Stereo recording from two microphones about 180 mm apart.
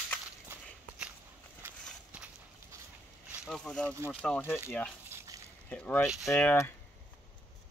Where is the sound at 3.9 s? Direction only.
15° right (ahead or behind).